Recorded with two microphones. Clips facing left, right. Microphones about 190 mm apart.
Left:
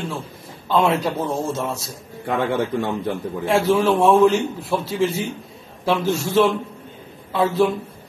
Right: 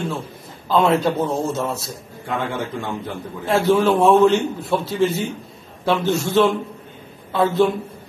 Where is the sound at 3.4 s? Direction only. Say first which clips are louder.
Right 1 dB; 5° left (ahead or behind).